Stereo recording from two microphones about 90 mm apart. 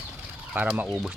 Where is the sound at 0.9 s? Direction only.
5° right (ahead or behind).